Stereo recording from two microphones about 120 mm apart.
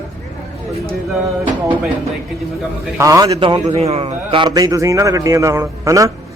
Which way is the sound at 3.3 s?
45° right (ahead or behind).